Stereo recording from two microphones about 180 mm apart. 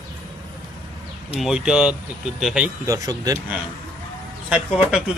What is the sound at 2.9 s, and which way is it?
Speech, 20° right (ahead or behind).